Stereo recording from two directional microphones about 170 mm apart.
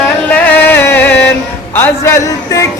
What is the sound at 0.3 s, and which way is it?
Music, 10° left (ahead or behind).